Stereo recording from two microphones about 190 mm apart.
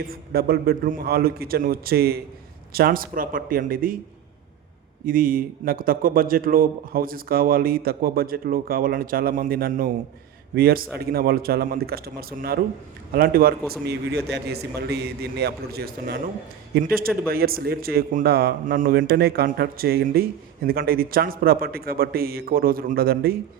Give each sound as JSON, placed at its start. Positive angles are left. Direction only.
{"t": 0.0, "sound": "a man's voice", "side_deg": -50}
{"t": 5.0, "sound": "a man's voice", "side_deg": -50}